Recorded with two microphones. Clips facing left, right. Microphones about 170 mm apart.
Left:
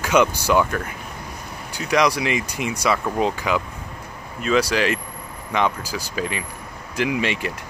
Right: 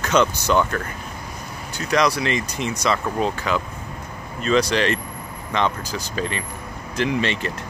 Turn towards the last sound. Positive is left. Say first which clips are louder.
# even
turn(degrees=10)  # may be behind; listen again after turning